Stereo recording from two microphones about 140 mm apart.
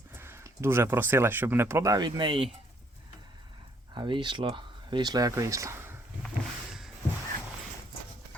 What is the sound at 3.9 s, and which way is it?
Speech, 35° right (ahead or behind).